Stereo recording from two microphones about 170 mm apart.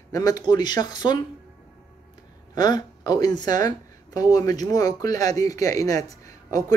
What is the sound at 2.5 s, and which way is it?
Speech, 25° left (ahead or behind).